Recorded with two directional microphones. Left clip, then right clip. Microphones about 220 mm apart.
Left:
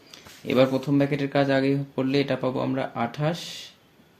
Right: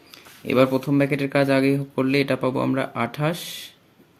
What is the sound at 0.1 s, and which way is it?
Speech, 25° right (ahead or behind).